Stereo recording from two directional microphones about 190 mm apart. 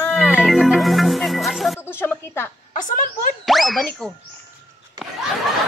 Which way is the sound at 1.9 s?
10° left (ahead or behind).